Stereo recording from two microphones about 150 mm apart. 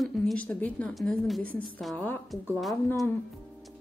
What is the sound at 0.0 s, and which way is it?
Speech, 5° left (ahead or behind).